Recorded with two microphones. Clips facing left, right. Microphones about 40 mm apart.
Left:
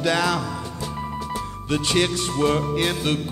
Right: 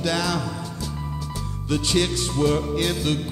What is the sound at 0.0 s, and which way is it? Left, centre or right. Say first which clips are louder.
Music: left 3 dB; left.